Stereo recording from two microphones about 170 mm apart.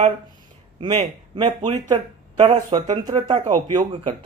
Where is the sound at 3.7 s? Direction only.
25° right (ahead or behind).